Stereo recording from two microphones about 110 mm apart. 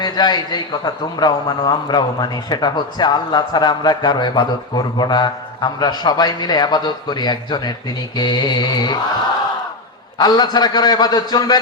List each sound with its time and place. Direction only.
0.0 s a man's voice: 40° left (ahead or behind)
10.2 s a man's voice: 40° left (ahead or behind)